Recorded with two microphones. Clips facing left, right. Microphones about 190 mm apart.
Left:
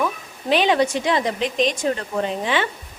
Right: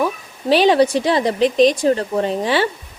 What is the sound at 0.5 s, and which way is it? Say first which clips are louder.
A woman's voice: right 5 dB; 35° right (ahead or behind).